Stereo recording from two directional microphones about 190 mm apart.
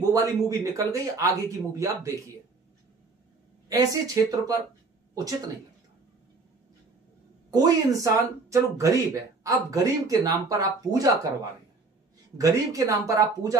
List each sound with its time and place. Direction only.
0.1 s a man's voice: 20° right (ahead or behind)
3.6 s a man's voice: 20° right (ahead or behind)
7.5 s speech: 20° right (ahead or behind)
12.4 s speech: 20° right (ahead or behind)